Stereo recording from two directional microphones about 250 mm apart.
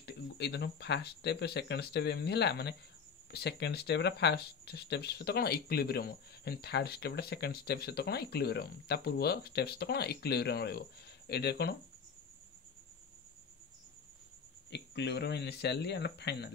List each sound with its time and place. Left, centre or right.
0.0 s speech: left
14.7 s speech: left